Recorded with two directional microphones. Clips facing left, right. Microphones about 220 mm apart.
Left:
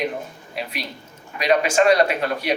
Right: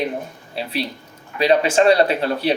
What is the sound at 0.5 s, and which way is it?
Speech, 30° right (ahead or behind).